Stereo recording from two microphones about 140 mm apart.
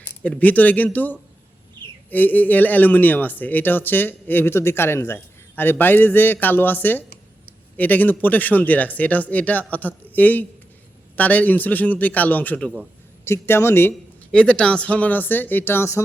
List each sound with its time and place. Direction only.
0.2 s speech: 10° left (ahead or behind)